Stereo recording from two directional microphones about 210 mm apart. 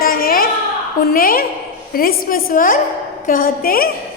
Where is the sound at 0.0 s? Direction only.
45° left (ahead or behind).